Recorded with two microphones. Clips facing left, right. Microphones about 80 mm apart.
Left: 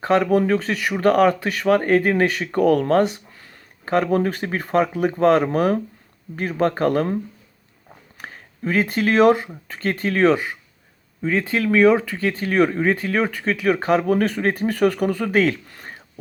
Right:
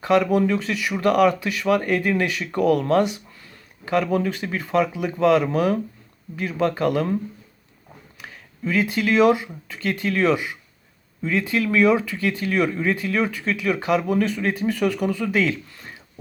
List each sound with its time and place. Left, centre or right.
0.0 s speech: left
8.2 s speech: left